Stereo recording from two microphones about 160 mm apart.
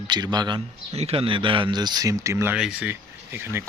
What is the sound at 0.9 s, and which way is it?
Speech, 40° right (ahead or behind).